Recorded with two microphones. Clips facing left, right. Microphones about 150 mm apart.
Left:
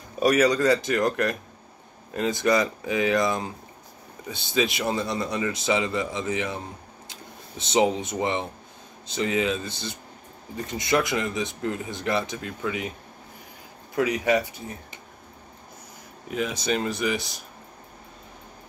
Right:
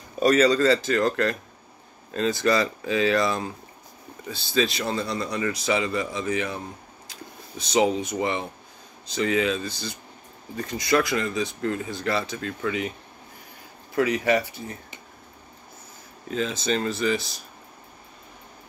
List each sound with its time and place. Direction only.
0.2 s speech: 10° left (ahead or behind)
13.9 s speech: 15° left (ahead or behind)
16.3 s speech: 10° left (ahead or behind)